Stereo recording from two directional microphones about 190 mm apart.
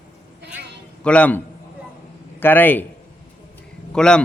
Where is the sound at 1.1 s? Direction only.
5° left (ahead or behind).